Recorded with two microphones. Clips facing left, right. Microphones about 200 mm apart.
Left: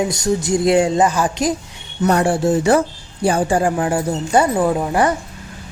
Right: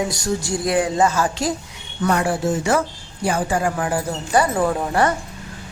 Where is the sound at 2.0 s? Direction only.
30° left (ahead or behind).